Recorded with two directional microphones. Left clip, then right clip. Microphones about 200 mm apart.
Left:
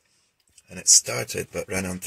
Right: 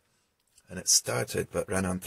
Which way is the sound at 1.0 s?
5° right (ahead or behind).